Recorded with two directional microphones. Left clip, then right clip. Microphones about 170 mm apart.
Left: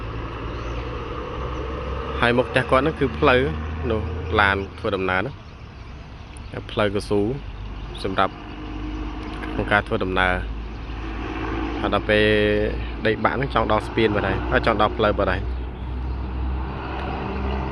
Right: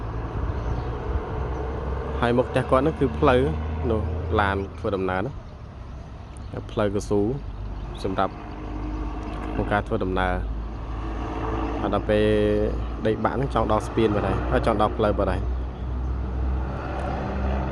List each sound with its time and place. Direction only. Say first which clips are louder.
2.2 s speech: left 3 dB; 10° right (ahead or behind)
6.7 s speech: left 2 dB; 10° right (ahead or behind)
9.6 s speech: left 4 dB; 10° right (ahead or behind)
11.8 s speech: left 4 dB; 10° right (ahead or behind)
17.4 s vehicle: left 1 dB; 15° right (ahead or behind)